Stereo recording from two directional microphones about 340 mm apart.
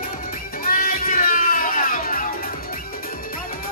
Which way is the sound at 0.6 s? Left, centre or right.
Left.